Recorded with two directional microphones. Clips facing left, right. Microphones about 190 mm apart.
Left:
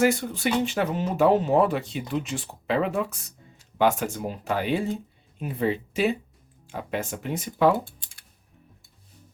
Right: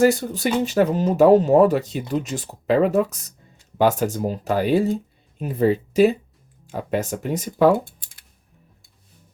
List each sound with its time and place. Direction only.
0.0 s speech: 40° right (ahead or behind)